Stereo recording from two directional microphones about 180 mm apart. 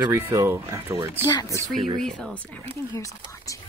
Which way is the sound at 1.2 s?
15° left (ahead or behind).